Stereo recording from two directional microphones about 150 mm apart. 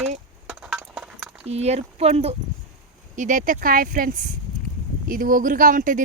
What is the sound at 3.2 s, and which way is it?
Speech, 60° right (ahead or behind).